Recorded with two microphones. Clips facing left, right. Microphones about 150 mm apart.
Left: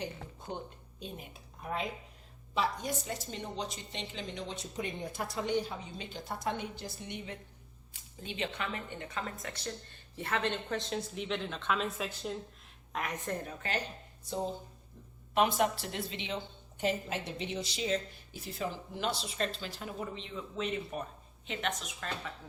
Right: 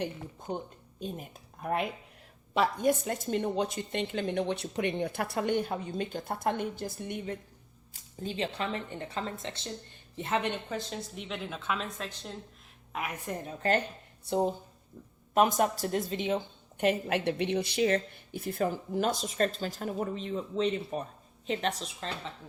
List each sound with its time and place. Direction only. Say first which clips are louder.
0.5 s a woman's voice: right 5 dB; 45° right (ahead or behind)
8.2 s speech: right 4 dB; 35° right (ahead or behind); by 10.6 s 20° right (ahead or behind)
10.7 s a woman's voice: left 1 dB; centre (ahead or behind)
12.9 s a woman's voice: right 1 dB; 5° right (ahead or behind)
13.6 s a woman's voice: right 9 dB; 50° right (ahead or behind)
14.3 s a woman's voice: right 7 dB; 60° right (ahead or behind)
15.4 s a woman's voice: right 3 dB; 45° right (ahead or behind); by 22.3 s 30° right (ahead or behind)